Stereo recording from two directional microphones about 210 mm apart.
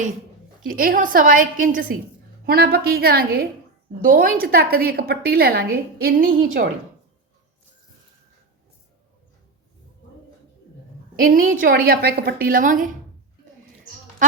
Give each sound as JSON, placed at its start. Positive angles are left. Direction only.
{"t": 0.7, "sound": "a woman's voice", "side_deg": -40}
{"t": 11.2, "sound": "a woman's voice", "side_deg": -40}